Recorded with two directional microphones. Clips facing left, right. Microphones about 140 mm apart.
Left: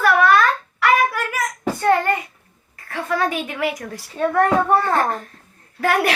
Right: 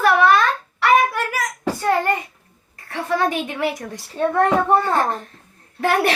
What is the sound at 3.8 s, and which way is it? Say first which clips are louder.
Speech: even; 20° right (ahead or behind).